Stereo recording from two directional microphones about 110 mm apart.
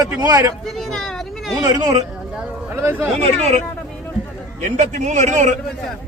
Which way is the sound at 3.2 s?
75° right (ahead or behind).